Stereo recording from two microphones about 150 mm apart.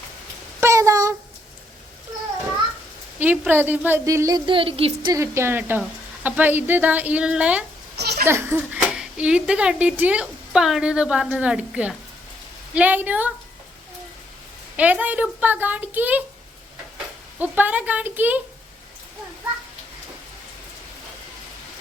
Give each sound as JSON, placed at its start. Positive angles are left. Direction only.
{"t": 0.6, "sound": "a sound", "side_deg": -20}
{"t": 3.2, "sound": "a woman's voice", "side_deg": -10}
{"t": 5.1, "sound": "speech", "side_deg": -20}
{"t": 7.9, "sound": "a sound", "side_deg": -90}
{"t": 8.3, "sound": "speech", "side_deg": -15}
{"t": 14.8, "sound": "speech", "side_deg": -10}
{"t": 17.4, "sound": "speech", "side_deg": -10}